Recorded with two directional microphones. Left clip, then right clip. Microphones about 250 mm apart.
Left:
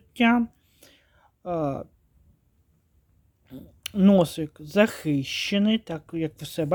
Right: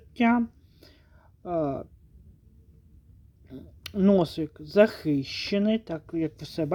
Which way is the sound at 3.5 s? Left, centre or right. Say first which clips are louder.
Left 3 dB; left.